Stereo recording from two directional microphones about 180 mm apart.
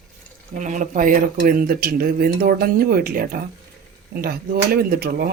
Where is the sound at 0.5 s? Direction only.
45° right (ahead or behind).